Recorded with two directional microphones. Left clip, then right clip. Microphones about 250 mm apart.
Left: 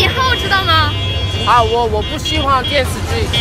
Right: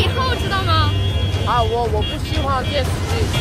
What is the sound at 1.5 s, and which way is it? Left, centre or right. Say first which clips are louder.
Speech: left 7 dB; centre.